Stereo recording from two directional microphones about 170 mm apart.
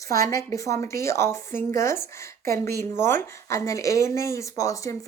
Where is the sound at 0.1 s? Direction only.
20° left (ahead or behind).